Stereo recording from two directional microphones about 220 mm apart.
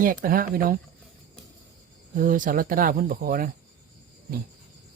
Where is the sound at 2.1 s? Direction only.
35° right (ahead or behind).